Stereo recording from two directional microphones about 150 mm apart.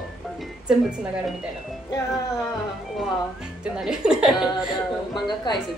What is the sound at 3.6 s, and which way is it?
A woman's voice, 5° right (ahead or behind).